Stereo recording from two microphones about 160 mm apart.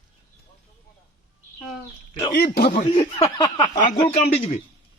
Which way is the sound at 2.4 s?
70° left (ahead or behind).